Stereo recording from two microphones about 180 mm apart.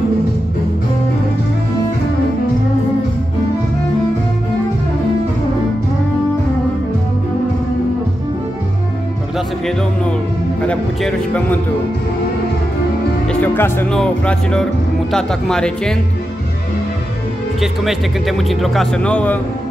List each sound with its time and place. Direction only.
10.7 s speech: 5° left (ahead or behind)
13.3 s speech: 10° left (ahead or behind)
17.6 s speech: centre (ahead or behind)